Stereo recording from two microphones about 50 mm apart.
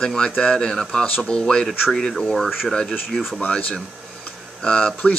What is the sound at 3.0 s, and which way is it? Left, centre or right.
Speech, centre.